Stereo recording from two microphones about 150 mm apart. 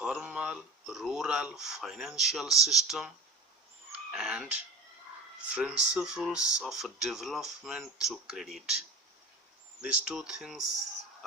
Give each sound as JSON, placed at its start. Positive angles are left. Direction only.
{"t": 0.0, "sound": "speech", "side_deg": -5}
{"t": 4.1, "sound": "speech", "side_deg": -5}
{"t": 9.8, "sound": "speech", "side_deg": -5}